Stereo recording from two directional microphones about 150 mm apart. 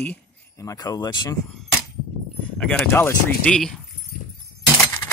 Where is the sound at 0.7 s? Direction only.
25° left (ahead or behind).